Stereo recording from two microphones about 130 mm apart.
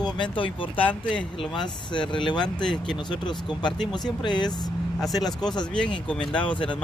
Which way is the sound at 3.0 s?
35° left (ahead or behind).